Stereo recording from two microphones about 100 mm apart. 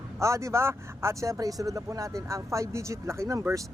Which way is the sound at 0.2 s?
30° right (ahead or behind).